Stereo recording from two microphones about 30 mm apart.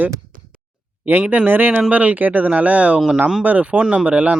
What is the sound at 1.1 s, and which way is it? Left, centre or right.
Speech, right.